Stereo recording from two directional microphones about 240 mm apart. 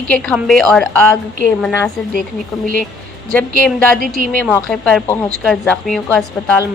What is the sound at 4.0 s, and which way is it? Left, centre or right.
Speech, right.